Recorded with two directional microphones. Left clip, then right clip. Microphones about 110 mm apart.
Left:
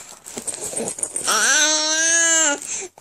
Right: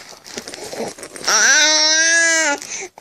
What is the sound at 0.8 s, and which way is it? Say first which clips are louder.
Dog: right 2 dB; 25° left (ahead or behind).